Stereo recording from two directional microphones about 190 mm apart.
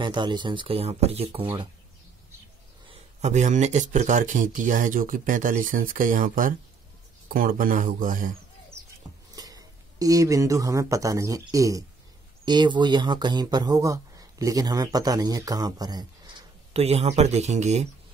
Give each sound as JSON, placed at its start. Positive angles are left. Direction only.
{"t": 0.0, "sound": "speech", "side_deg": -25}
{"t": 2.9, "sound": "speech", "side_deg": -35}
{"t": 8.8, "sound": "a sound", "side_deg": -15}
{"t": 9.3, "sound": "speech", "side_deg": -20}